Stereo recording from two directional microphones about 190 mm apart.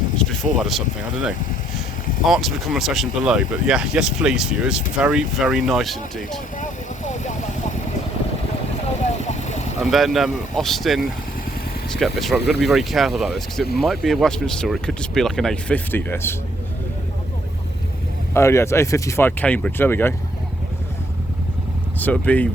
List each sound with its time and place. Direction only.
0.2 s speech: centre (ahead or behind)
2.2 s speech: centre (ahead or behind)
6.6 s a sound: 40° left (ahead or behind)
9.2 s vehicle: 35° left (ahead or behind)
9.8 s speech: centre (ahead or behind)
18.3 s speech: 15° left (ahead or behind)
21.9 s speech: 10° left (ahead or behind)